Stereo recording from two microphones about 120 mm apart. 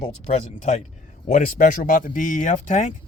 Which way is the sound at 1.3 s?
90° left.